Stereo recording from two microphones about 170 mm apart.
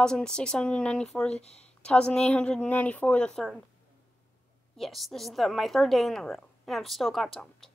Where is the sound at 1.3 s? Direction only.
40° left (ahead or behind).